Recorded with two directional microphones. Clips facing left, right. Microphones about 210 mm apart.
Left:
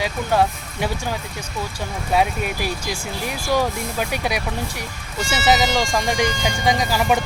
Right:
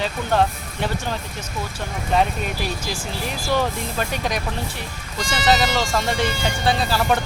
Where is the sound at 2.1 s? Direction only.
10° left (ahead or behind).